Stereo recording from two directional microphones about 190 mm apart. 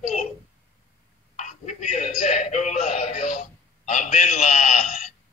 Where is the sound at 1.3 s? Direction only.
40° left (ahead or behind).